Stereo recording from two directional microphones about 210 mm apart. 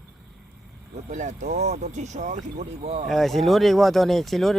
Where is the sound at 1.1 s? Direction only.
35° right (ahead or behind).